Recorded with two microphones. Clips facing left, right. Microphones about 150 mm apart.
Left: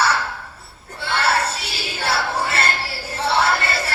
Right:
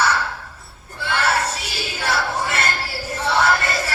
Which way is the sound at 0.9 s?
30° left (ahead or behind).